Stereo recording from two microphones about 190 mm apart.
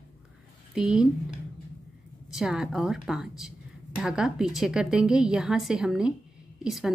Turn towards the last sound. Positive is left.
turn(degrees=0)  # may be behind; listen again after turning